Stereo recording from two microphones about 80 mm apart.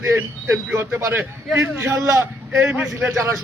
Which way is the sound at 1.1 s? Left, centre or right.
Right.